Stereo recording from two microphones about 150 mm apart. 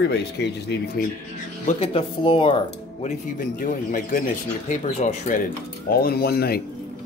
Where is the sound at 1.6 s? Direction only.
40° left (ahead or behind).